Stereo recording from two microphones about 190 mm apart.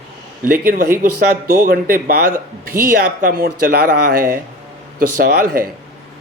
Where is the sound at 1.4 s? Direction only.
50° right (ahead or behind).